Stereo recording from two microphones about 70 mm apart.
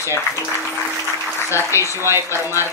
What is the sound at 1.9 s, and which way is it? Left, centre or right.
Speech, right.